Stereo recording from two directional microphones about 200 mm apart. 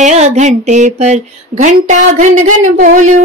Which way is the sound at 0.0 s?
35° right (ahead or behind).